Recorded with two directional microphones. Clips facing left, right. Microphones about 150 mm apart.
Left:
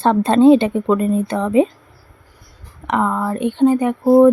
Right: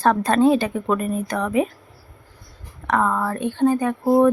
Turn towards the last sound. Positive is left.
turn(degrees=20)  # may be behind; listen again after turning